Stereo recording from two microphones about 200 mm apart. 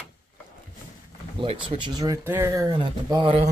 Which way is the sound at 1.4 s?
25° right (ahead or behind).